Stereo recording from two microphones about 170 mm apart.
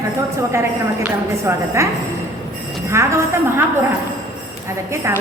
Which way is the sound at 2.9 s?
15° right (ahead or behind).